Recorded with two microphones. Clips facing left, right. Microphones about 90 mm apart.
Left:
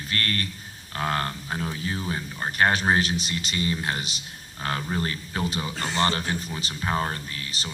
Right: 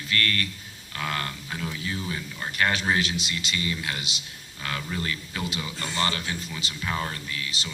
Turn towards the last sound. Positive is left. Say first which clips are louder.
# right 1 dB
turn(degrees=40)  # may be behind; listen again after turning